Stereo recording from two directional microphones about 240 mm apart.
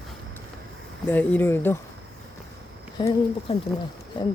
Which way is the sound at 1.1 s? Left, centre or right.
Centre.